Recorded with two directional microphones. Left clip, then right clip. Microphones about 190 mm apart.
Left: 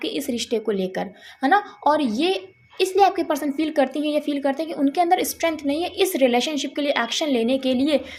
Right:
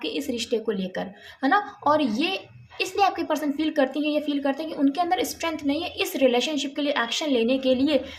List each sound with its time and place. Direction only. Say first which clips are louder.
0.0 s a woman's voice: left 2 dB; 35° left (ahead or behind)